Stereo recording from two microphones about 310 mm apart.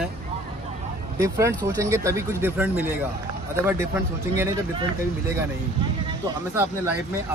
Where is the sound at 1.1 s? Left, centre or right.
Centre.